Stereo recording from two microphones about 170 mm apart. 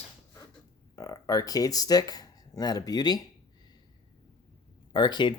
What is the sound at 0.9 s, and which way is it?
Speech, 20° left (ahead or behind).